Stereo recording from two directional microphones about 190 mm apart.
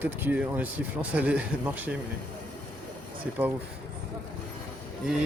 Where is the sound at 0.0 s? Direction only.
10° right (ahead or behind).